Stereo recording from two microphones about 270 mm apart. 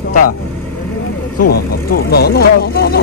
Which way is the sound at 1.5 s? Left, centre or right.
Left.